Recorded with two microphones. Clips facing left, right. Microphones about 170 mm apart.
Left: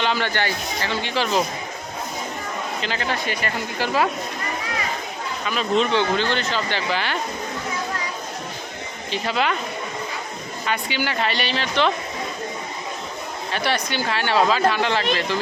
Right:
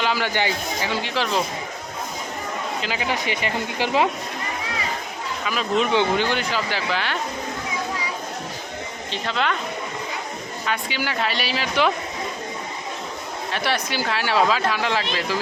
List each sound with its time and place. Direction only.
0.0 s speech: 5° right (ahead or behind)
1.0 s speech: centre (ahead or behind)
2.8 s speech: 10° right (ahead or behind)
5.5 s speech: 5° right (ahead or behind)
9.1 s speech: 5° left (ahead or behind)
10.7 s speech: centre (ahead or behind)
13.5 s speech: centre (ahead or behind)